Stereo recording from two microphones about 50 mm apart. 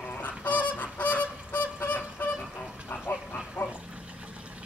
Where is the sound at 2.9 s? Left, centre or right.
Left.